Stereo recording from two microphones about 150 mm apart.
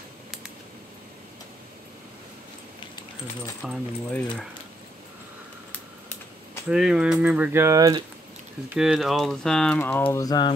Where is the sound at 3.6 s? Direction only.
5° right (ahead or behind).